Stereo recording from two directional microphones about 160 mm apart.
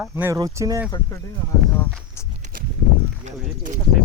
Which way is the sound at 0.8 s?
15° left (ahead or behind).